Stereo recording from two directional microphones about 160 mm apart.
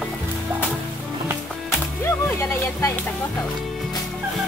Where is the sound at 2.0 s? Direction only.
15° left (ahead or behind).